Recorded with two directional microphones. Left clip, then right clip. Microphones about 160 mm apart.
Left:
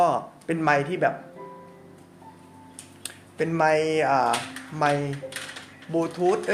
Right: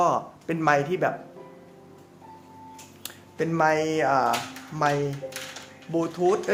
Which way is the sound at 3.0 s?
15° right (ahead or behind).